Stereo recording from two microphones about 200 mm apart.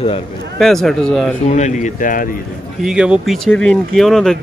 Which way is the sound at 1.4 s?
35° left (ahead or behind).